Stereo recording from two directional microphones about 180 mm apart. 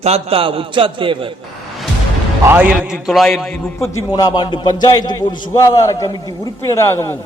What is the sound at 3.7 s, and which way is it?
A man's voice, 15° left (ahead or behind).